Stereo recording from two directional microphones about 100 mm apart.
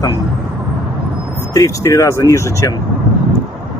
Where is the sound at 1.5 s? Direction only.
30° left (ahead or behind).